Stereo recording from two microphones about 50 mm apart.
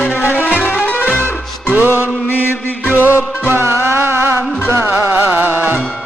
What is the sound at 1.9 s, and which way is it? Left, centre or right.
Mantra, left.